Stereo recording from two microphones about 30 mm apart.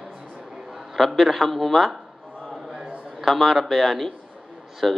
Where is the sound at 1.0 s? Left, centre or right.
Centre.